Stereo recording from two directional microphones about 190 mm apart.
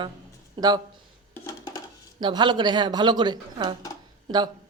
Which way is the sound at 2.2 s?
25° right (ahead or behind).